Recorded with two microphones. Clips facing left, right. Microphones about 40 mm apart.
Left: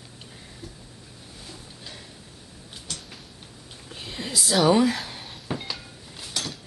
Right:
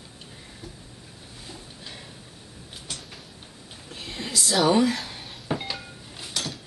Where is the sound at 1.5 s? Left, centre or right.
Centre.